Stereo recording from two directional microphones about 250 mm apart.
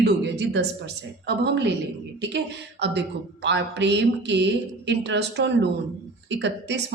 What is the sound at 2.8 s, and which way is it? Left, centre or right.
A woman's voice, right.